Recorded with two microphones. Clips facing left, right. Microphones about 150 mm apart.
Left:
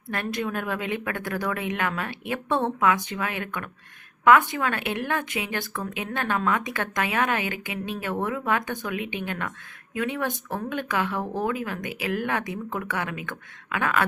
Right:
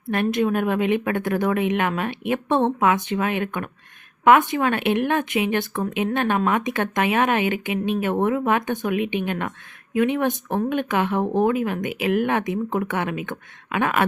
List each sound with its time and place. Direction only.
0.1 s speech: 20° right (ahead or behind)